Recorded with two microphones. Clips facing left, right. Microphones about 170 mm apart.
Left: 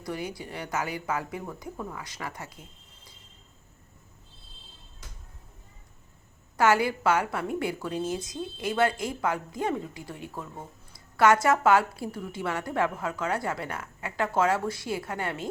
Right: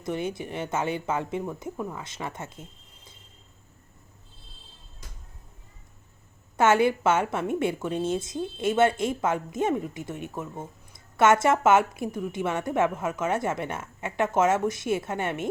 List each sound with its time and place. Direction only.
0.0 s a woman's voice: 25° right (ahead or behind)
6.6 s a woman's voice: 25° right (ahead or behind)